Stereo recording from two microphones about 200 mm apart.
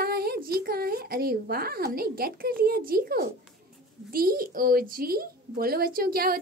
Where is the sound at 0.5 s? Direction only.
50° right (ahead or behind).